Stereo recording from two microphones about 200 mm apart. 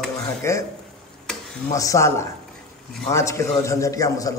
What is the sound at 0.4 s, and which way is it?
Speech, 15° left (ahead or behind).